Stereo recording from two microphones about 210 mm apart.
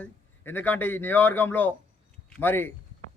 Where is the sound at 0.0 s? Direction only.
10° left (ahead or behind).